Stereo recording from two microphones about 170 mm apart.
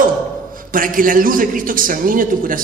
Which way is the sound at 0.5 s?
55° right (ahead or behind).